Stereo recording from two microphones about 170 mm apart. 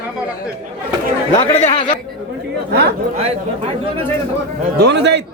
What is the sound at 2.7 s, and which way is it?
Speech, 75° right (ahead or behind).